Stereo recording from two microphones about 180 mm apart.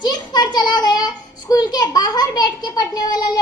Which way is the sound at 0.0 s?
20° left (ahead or behind).